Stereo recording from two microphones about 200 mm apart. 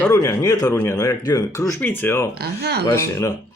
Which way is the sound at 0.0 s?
15° left (ahead or behind).